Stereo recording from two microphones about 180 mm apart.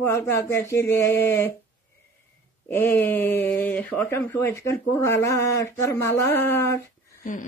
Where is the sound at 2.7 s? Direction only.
10° left (ahead or behind).